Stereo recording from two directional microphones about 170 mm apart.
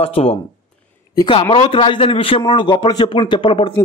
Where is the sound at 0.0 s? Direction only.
35° left (ahead or behind).